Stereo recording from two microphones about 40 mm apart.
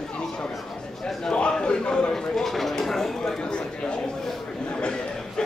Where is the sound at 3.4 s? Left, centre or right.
Left.